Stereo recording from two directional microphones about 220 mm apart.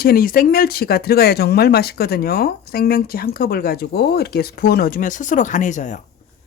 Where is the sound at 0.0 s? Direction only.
40° left (ahead or behind).